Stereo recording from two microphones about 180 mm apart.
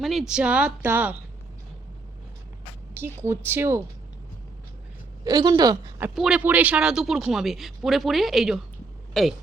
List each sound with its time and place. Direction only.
0.0 s a woman's voice: centre (ahead or behind)
2.9 s a woman's voice: 15° right (ahead or behind)
5.2 s speech: 25° right (ahead or behind)
6.1 s speech: 5° right (ahead or behind)